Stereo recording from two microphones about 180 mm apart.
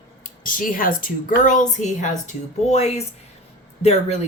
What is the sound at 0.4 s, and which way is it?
A woman's voice, 50° left (ahead or behind).